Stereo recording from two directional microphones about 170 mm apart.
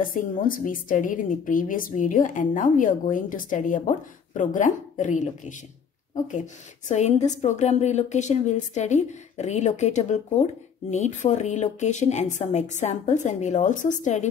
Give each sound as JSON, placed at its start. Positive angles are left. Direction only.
{"t": 0.1, "sound": "a woman's voice", "side_deg": 55}